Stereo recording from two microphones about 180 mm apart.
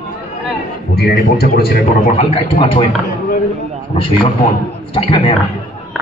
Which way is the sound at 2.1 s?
35° left (ahead or behind).